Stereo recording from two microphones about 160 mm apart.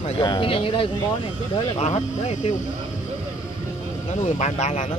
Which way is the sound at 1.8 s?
45° left (ahead or behind).